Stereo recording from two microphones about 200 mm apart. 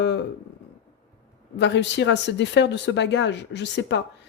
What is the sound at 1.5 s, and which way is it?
Speech, 60° left (ahead or behind).